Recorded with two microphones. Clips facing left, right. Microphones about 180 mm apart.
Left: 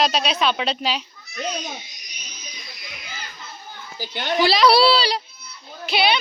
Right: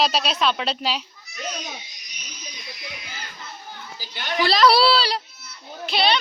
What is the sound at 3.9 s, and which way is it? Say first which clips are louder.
Speech: left 11 dB; 55° left (ahead or behind).